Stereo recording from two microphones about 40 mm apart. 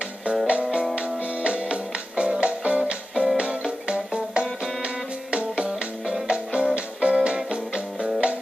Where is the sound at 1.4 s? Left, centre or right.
Right.